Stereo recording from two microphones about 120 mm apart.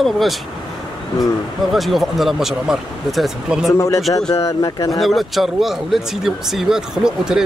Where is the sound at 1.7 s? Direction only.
Centre (ahead or behind).